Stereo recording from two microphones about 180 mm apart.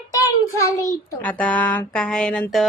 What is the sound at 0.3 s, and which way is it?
A child's voice, 20° left (ahead or behind).